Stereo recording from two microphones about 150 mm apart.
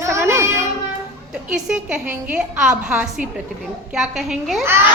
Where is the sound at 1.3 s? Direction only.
5° right (ahead or behind).